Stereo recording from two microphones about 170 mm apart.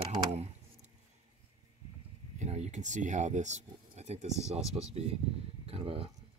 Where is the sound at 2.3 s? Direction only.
40° right (ahead or behind).